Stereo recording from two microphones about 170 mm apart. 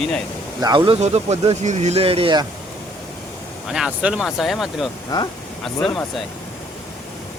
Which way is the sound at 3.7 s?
5° right (ahead or behind).